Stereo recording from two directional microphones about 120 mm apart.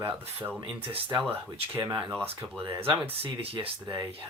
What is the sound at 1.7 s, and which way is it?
Speech, 25° right (ahead or behind).